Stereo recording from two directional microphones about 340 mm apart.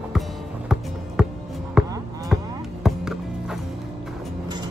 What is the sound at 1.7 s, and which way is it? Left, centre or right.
Basketball bounce, centre.